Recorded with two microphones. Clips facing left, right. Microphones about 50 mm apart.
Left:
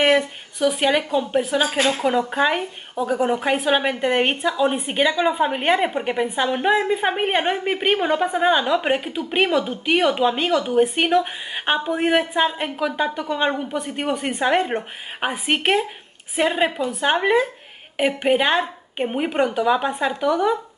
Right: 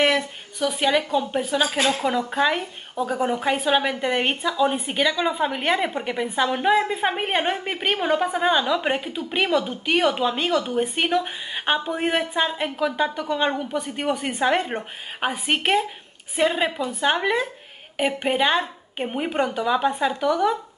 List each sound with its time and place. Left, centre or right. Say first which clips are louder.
0.0 s a woman's voice: left 3 dB; centre